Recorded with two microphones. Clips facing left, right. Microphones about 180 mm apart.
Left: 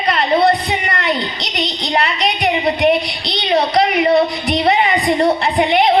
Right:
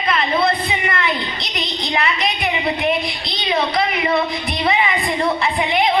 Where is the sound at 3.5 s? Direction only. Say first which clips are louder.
Left 5 dB; 40° left (ahead or behind).